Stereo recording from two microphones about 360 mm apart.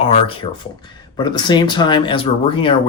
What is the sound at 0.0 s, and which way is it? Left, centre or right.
Speech, centre.